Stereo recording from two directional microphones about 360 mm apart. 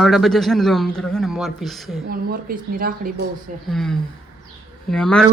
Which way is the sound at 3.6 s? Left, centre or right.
Centre.